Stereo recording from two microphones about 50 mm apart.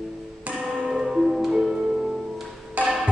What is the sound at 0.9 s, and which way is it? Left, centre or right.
Music, centre.